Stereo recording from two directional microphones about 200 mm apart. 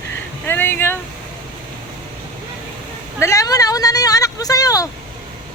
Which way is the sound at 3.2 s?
15° left (ahead or behind).